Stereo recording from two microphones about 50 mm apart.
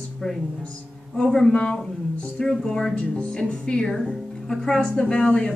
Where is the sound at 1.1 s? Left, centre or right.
Centre.